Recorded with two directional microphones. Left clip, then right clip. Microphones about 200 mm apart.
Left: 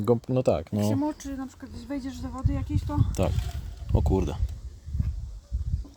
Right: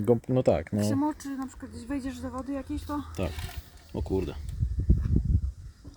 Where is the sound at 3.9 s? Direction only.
40° left (ahead or behind).